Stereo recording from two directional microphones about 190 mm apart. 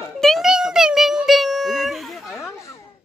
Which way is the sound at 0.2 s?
Centre (ahead or behind).